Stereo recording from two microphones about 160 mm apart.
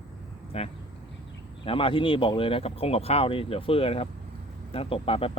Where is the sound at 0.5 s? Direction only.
40° left (ahead or behind).